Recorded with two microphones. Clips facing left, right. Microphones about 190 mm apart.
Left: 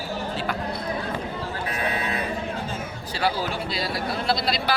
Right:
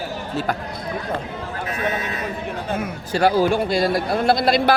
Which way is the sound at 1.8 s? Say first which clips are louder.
Right 2 dB; 30° left (ahead or behind).